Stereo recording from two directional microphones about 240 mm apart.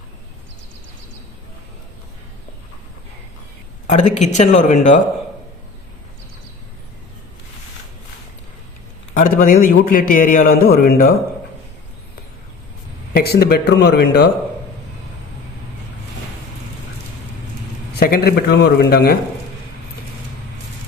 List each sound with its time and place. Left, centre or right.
3.8 s speech: left
9.1 s a man's voice: left
13.1 s speech: left
18.0 s a man's voice: left